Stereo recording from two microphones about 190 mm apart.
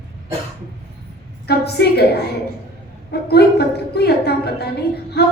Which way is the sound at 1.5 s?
60° left (ahead or behind).